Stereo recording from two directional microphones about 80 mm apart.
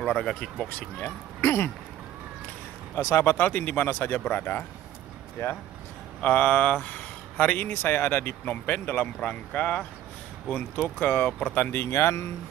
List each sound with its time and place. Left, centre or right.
0.0 s speech: centre
1.4 s a sound: left
3.0 s speech: left
3.3 s speech: left
5.4 s speech: left
6.2 s speech: left
11.2 s speech: centre
11.5 s speech: left